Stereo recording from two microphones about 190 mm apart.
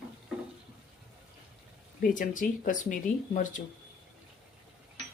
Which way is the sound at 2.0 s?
45° left (ahead or behind).